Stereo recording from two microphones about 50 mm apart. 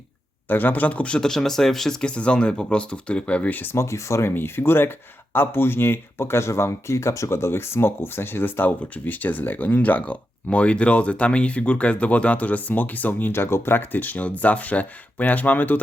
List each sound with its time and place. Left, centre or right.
0.4 s speech: left
1.2 s speech: centre
2.0 s speech: left
3.5 s speech: left
3.8 s speech: left